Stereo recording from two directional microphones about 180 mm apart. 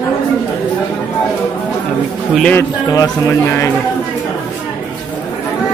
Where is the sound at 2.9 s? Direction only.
15° left (ahead or behind).